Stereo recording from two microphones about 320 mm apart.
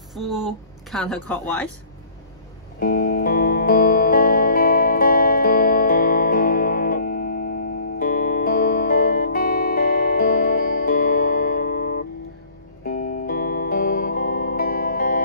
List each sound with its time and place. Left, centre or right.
0.1 s speech: centre
2.8 s music: left